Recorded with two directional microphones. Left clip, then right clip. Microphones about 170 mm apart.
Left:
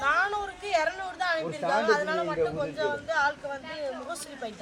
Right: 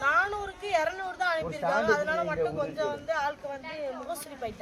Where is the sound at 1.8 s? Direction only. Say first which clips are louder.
Left 1 dB; 10° right (ahead or behind).